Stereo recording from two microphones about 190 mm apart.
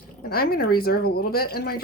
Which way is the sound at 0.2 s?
55° left (ahead or behind).